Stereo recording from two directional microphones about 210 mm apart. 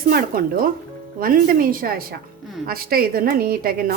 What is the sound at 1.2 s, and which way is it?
A woman's voice, 45° right (ahead or behind).